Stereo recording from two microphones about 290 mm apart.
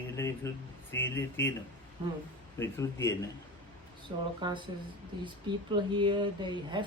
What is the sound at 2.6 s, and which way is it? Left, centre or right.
Speech, centre.